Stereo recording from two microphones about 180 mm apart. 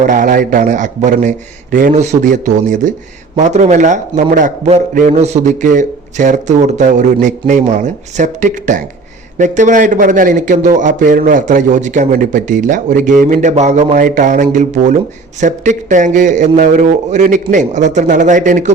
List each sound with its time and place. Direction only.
0.0 s a man's voice: 45° right (ahead or behind)